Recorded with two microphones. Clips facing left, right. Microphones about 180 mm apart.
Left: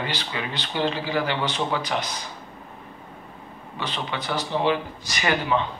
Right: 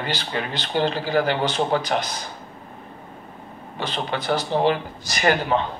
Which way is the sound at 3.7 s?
45° right (ahead or behind).